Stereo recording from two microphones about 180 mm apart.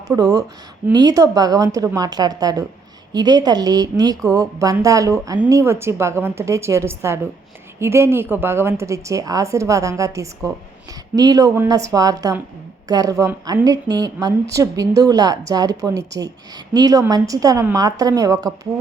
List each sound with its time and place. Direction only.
0.1 s a woman's voice: 20° right (ahead or behind)